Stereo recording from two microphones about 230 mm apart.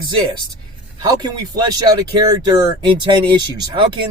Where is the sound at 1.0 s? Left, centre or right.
Centre.